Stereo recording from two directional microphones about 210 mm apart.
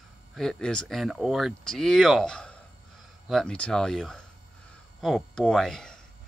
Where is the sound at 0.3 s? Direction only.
Centre (ahead or behind).